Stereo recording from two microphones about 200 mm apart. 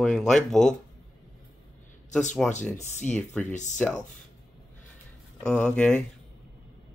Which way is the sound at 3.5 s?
35° left (ahead or behind).